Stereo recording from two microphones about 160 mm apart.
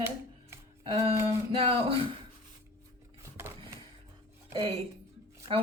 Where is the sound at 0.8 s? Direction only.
35° right (ahead or behind).